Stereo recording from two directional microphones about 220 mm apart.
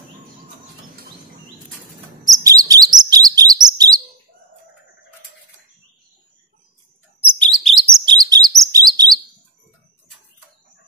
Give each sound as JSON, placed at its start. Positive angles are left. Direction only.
{"t": 2.4, "sound": "chirp", "side_deg": -15}
{"t": 7.2, "sound": "chirp", "side_deg": 5}
{"t": 8.0, "sound": "chirp", "side_deg": -20}